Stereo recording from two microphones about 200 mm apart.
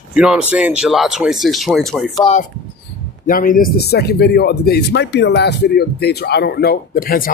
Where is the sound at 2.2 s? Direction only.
35° left (ahead or behind).